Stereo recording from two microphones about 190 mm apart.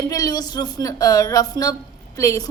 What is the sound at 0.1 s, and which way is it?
A woman's voice, 20° left (ahead or behind).